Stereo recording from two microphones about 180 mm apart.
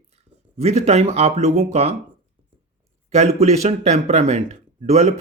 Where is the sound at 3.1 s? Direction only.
35° right (ahead or behind).